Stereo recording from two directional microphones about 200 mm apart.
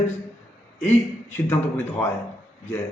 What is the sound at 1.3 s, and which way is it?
Speech, 10° left (ahead or behind).